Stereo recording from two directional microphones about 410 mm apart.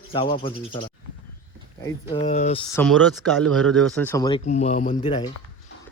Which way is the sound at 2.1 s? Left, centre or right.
Centre.